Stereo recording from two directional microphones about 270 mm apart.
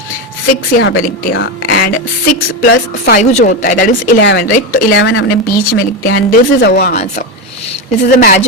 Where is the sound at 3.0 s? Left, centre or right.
Left.